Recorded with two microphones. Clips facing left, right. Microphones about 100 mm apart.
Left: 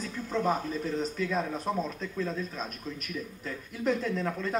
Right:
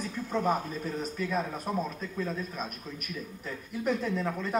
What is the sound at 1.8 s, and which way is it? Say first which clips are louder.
Speech: left 1 dB; 10° right (ahead or behind).